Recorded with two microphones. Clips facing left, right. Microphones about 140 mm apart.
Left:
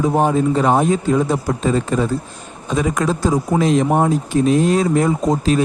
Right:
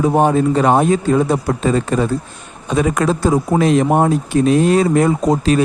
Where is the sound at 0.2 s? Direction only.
65° right (ahead or behind).